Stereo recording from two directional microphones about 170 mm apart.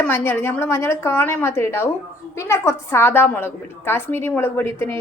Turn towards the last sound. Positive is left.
turn(degrees=15)  # may be behind; listen again after turning